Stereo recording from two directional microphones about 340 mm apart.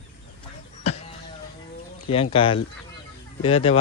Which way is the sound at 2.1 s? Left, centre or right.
Centre.